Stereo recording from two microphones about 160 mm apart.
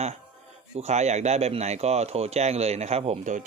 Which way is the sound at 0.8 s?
45° right (ahead or behind).